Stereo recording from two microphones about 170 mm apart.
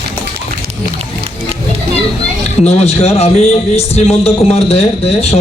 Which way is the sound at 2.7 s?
40° left (ahead or behind).